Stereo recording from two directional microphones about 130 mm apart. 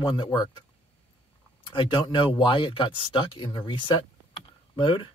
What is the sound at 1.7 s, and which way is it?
Speech, 40° left (ahead or behind).